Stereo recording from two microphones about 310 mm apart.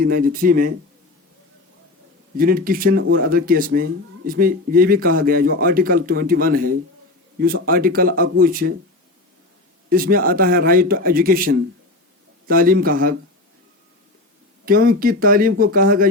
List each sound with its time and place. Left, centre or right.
0.0 s speech: right
2.4 s speech: right
9.9 s speech: right
14.6 s speech: right